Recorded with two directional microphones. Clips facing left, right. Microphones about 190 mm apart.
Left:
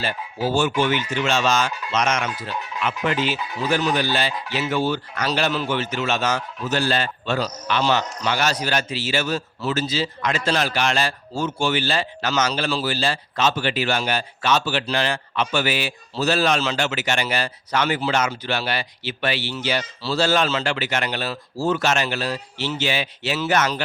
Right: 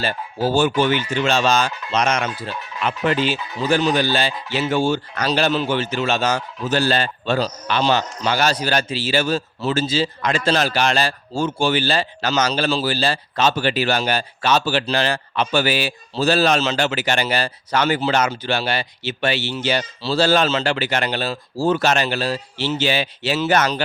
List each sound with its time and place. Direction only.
0.4 s speech: 35° right (ahead or behind)